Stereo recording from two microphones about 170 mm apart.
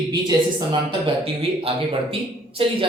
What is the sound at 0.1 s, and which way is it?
Speech, 25° right (ahead or behind).